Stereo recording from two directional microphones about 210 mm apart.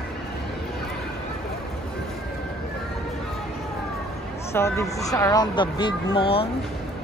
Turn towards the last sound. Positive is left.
turn(degrees=25)  # may be behind; listen again after turning